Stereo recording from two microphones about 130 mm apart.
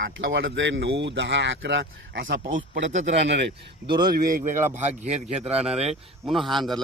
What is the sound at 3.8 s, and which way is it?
Speech, 35° right (ahead or behind).